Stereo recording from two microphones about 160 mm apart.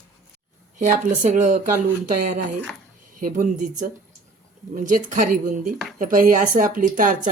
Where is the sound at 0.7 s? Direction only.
55° right (ahead or behind).